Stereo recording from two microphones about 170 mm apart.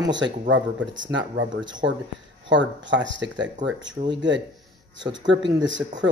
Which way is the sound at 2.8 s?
90° right.